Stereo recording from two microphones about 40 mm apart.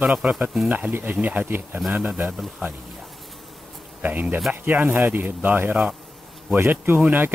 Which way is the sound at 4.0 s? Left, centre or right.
Right.